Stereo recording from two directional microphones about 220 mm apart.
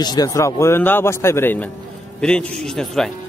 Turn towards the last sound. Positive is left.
turn(degrees=5)  # may be behind; listen again after turning